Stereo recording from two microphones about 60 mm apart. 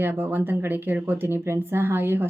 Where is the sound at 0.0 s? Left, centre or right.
Right.